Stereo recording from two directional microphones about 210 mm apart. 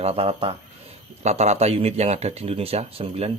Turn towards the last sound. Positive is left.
turn(degrees=-30)  # may be behind; listen again after turning